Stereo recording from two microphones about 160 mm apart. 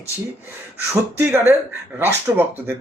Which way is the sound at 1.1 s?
10° right (ahead or behind).